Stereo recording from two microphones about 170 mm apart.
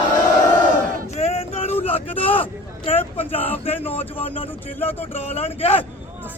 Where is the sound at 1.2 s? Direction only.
40° left (ahead or behind).